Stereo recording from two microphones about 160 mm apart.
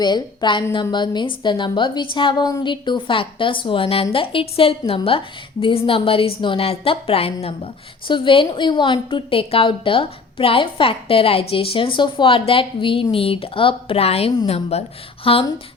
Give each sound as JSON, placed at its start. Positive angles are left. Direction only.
{"t": 0.0, "sound": "a woman's voice", "side_deg": 30}